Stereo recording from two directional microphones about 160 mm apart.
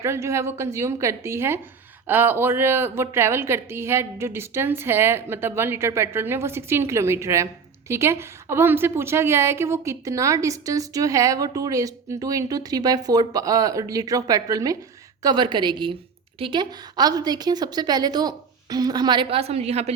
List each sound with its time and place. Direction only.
0.0 s a woman's voice: 15° right (ahead or behind); by 19.9 s 40° right (ahead or behind)